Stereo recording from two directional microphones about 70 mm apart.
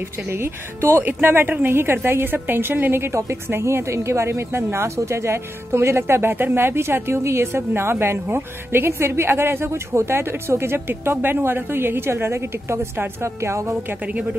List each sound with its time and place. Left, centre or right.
0.3 s a woman's voice: right